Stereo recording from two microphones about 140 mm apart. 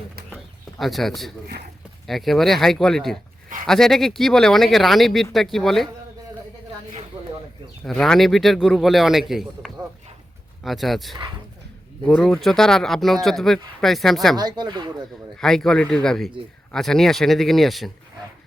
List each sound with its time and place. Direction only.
0.8 s speech: centre (ahead or behind)
7.9 s speech: 5° left (ahead or behind)
14.3 s speech: 30° right (ahead or behind)
15.4 s speech: 5° left (ahead or behind)